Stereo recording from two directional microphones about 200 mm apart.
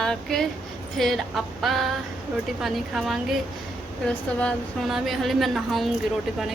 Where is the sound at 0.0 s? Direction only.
Centre (ahead or behind).